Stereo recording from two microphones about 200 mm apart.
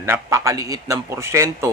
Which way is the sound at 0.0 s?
15° right (ahead or behind).